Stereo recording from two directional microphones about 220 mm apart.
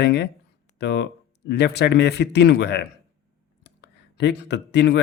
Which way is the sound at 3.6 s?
50° left (ahead or behind).